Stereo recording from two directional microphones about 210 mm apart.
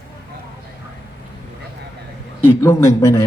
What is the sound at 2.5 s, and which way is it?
Speech, 10° left (ahead or behind).